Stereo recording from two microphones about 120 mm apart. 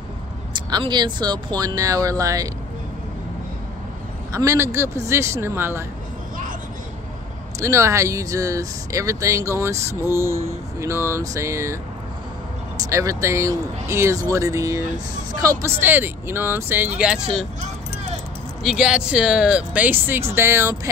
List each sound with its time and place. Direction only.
0.5 s speech: 40° right (ahead or behind)
4.3 s speech: 25° right (ahead or behind)
7.6 s speech: 25° right (ahead or behind)
15.6 s speech: 15° right (ahead or behind)
18.6 s speech: 5° right (ahead or behind); by 20.9 s 25° right (ahead or behind)